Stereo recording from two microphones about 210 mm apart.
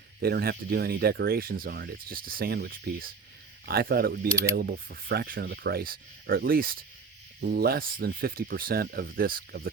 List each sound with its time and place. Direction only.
0.2 s speech: 45° right (ahead or behind)